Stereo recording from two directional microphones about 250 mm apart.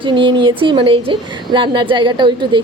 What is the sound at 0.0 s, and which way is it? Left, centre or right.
A woman's voice, centre.